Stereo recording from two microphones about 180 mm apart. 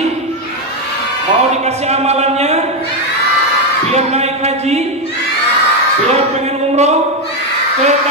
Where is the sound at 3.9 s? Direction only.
35° right (ahead or behind).